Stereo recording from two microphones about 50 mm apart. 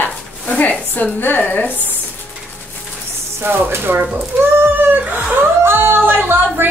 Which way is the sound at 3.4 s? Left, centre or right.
Right.